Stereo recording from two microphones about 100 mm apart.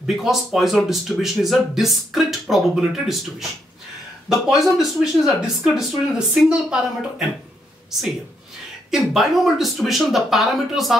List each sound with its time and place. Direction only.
0.0 s speech: 5° right (ahead or behind)
8.9 s speech: 5° right (ahead or behind)